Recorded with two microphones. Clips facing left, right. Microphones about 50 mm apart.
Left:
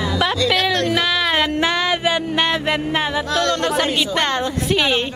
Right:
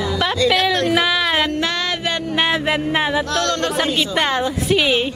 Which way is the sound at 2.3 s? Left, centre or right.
Centre.